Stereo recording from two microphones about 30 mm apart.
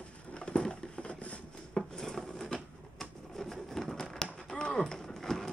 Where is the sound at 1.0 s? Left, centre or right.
Left.